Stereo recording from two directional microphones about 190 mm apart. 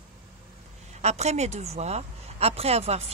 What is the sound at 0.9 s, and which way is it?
A woman's voice, 35° right (ahead or behind).